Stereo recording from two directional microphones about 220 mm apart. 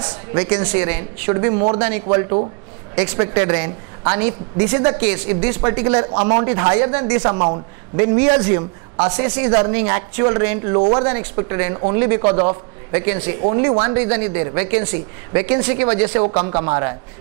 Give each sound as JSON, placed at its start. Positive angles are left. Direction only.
{"t": 0.0, "sound": "a woman's voice", "side_deg": -20}
{"t": 3.0, "sound": "a woman's voice", "side_deg": -20}
{"t": 5.2, "sound": "a woman's voice", "side_deg": -10}
{"t": 5.6, "sound": "a woman's voice", "side_deg": -20}